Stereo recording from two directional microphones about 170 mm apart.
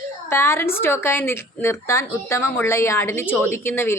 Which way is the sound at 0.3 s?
15° left (ahead or behind).